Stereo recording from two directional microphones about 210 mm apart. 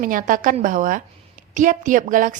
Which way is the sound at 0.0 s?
40° right (ahead or behind).